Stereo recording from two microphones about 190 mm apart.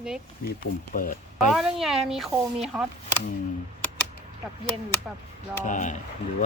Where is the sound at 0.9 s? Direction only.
45° left (ahead or behind).